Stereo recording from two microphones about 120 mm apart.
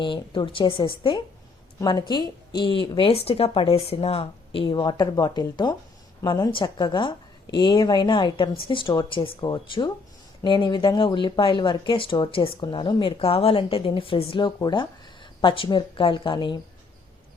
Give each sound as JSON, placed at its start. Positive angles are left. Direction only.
{"t": 0.0, "sound": "speech", "side_deg": 45}